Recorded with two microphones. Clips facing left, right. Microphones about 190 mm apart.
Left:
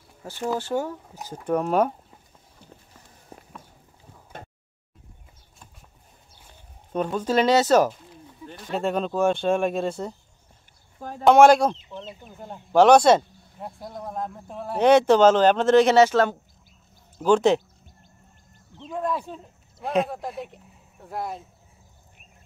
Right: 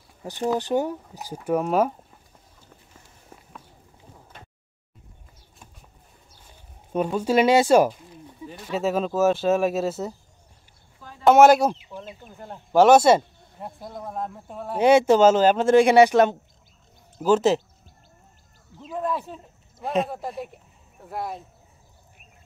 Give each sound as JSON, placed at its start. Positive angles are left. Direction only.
{"t": 0.2, "sound": "speech", "side_deg": -20}
{"t": 3.3, "sound": "walk", "side_deg": 35}
{"t": 6.9, "sound": "speech", "side_deg": -10}
{"t": 11.0, "sound": "a sound", "side_deg": 50}
{"t": 11.2, "sound": "speech", "side_deg": -5}
{"t": 17.2, "sound": "speech", "side_deg": -5}
{"t": 18.8, "sound": "speech", "side_deg": -5}